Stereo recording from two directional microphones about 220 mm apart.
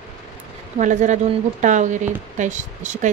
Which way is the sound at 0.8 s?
35° right (ahead or behind).